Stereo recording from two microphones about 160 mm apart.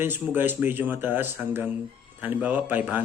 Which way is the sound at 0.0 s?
10° right (ahead or behind).